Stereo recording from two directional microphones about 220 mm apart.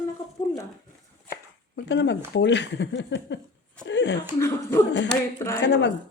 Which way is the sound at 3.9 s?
55° left (ahead or behind).